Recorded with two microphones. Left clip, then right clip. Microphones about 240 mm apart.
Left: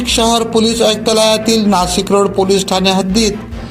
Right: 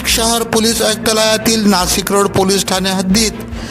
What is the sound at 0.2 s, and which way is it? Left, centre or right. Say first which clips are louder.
Music: left 2 dB; right.